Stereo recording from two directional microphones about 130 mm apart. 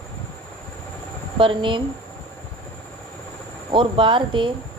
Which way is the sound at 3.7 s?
40° right (ahead or behind).